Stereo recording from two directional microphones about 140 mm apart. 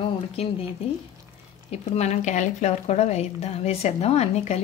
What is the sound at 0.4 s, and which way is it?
Speech, 45° left (ahead or behind).